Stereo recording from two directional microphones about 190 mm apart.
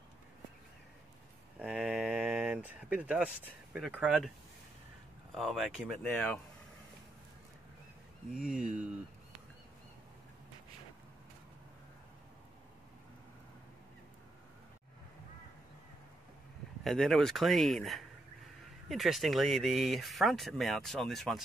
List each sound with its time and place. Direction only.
1.6 s a sound: 5° right (ahead or behind)
3.7 s speech: 5° right (ahead or behind)
5.3 s speech: centre (ahead or behind)
8.3 s speech: 5° right (ahead or behind)
16.8 s speech: centre (ahead or behind)